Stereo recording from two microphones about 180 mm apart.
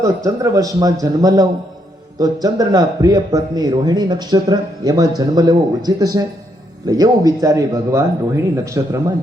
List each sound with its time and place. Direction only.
0.0 s speech: 15° right (ahead or behind)